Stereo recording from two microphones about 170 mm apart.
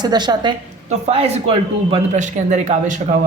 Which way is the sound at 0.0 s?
25° right (ahead or behind).